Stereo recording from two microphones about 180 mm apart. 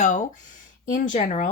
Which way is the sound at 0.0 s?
45° left (ahead or behind).